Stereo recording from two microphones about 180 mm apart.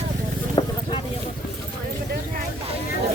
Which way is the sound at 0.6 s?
30° left (ahead or behind).